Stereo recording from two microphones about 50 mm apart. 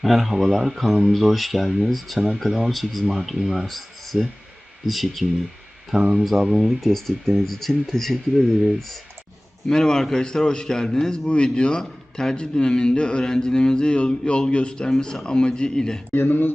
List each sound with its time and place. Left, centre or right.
0.0 s speech: centre
5.9 s speech: centre
9.6 s a man's voice: centre
16.1 s speech: left